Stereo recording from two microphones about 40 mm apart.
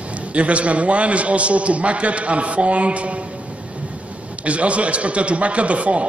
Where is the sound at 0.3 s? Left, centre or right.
Right.